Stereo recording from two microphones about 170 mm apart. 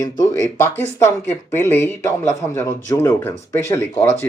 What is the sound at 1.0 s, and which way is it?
Speech, 15° left (ahead or behind).